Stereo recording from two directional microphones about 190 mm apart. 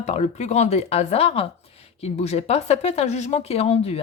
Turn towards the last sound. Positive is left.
turn(degrees=35)  # may be behind; listen again after turning